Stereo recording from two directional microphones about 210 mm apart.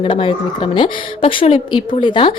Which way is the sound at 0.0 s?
25° left (ahead or behind).